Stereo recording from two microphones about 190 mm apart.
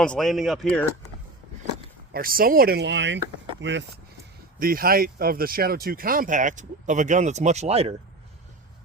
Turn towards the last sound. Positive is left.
turn(degrees=-35)  # may be behind; listen again after turning